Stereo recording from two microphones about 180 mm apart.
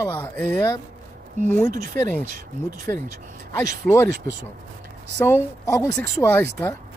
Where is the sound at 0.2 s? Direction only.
10° left (ahead or behind).